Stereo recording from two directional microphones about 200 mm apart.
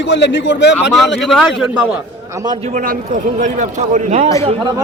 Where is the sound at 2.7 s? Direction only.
40° right (ahead or behind).